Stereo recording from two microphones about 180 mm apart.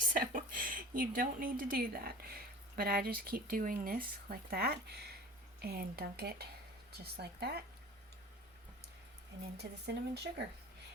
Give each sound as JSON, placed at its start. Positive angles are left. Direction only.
{"t": 0.0, "sound": "a woman's voice", "side_deg": -50}
{"t": 9.6, "sound": "speech", "side_deg": -65}